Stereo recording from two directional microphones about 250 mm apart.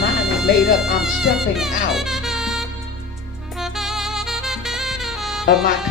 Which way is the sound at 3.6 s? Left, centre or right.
Centre.